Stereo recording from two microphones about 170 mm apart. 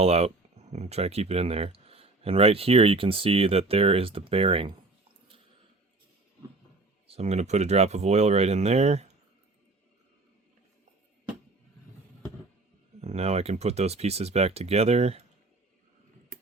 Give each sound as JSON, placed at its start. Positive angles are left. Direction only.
{"t": 0.0, "sound": "speech", "side_deg": -35}
{"t": 7.1, "sound": "speech", "side_deg": -40}
{"t": 13.0, "sound": "speech", "side_deg": -40}